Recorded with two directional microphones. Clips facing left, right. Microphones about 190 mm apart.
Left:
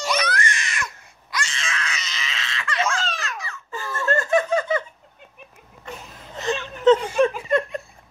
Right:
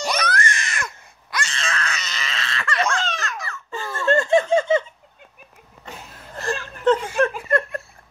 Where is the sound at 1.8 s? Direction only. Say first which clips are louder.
Right 2 dB; 55° right (ahead or behind).